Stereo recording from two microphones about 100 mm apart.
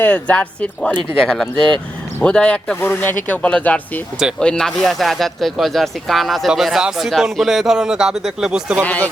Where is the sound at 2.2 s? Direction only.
10° left (ahead or behind); by 8.8 s 5° right (ahead or behind).